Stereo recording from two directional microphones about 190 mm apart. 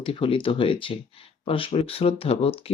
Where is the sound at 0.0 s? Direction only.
30° left (ahead or behind).